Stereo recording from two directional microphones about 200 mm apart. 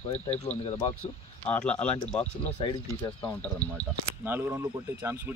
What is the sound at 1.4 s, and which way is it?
Speech, 5° left (ahead or behind).